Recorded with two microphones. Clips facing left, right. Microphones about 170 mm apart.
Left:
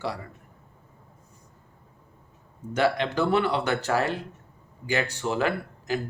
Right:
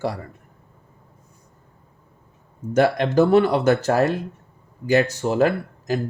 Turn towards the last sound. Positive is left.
turn(degrees=-40)  # may be behind; listen again after turning